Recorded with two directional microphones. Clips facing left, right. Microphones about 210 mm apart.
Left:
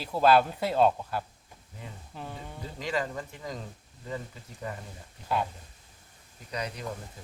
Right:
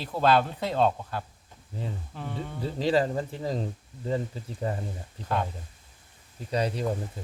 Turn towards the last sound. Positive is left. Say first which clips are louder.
# right 8 dB
turn(degrees=-30)  # may be behind; listen again after turning